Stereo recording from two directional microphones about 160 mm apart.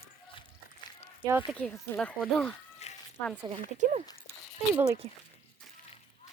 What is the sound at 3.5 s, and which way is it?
Speech, 45° right (ahead or behind).